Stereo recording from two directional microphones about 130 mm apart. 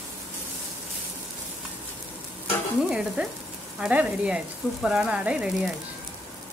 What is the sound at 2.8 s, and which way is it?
Speech, 5° right (ahead or behind).